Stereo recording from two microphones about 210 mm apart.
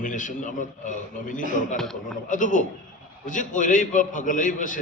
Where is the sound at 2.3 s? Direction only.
40° left (ahead or behind).